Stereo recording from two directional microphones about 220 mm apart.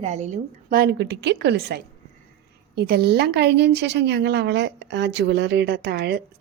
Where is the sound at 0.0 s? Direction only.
30° right (ahead or behind).